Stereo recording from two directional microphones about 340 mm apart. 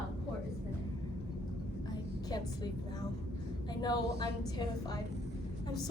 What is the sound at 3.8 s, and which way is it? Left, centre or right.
Speech, centre.